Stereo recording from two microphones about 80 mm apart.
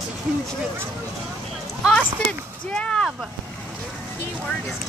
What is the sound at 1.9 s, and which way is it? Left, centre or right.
Speech, centre.